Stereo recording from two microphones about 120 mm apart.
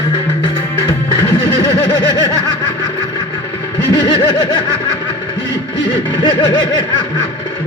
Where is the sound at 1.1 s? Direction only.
35° left (ahead or behind).